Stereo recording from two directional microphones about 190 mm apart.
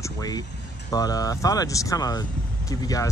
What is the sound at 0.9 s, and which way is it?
Speech, 20° left (ahead or behind).